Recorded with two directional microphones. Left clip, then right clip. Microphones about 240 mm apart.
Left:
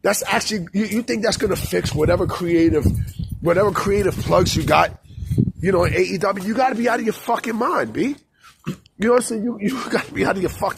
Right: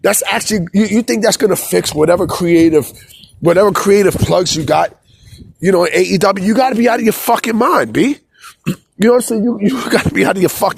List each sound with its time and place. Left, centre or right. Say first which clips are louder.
0.0 s speech: right 5 dB; right
4.3 s speech: right 4 dB; right
5.6 s speech: right 7 dB; right